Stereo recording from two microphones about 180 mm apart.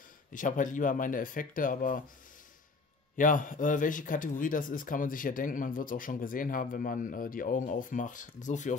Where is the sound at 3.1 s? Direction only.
45° left (ahead or behind).